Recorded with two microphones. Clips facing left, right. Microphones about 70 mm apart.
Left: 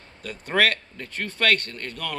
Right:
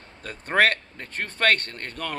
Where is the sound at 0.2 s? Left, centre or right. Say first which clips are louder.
Right 1 dB; right.